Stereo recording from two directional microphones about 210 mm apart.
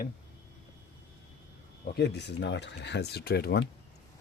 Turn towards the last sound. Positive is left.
turn(degrees=50)  # may be behind; listen again after turning